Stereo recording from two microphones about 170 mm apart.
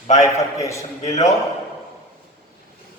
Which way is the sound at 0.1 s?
20° left (ahead or behind).